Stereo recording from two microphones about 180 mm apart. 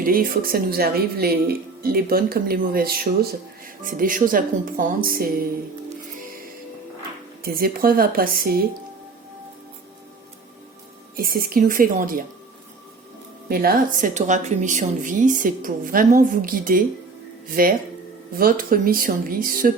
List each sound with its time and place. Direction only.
0.0 s a woman's voice: 50° right (ahead or behind)
7.4 s speech: 55° right (ahead or behind)
11.2 s a woman's voice: 55° right (ahead or behind)
13.5 s a woman's voice: 55° right (ahead or behind)